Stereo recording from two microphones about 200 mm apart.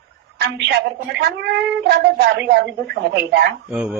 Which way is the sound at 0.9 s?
55° right (ahead or behind).